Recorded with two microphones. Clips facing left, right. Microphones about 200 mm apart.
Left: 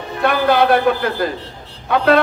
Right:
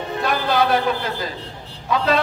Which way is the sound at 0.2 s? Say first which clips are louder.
Left 6 dB; 60° left (ahead or behind).